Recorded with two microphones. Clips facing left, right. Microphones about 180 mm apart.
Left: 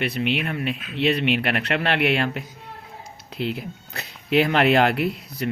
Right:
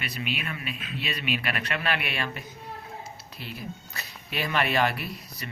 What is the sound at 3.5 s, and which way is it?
Speech, 60° left (ahead or behind).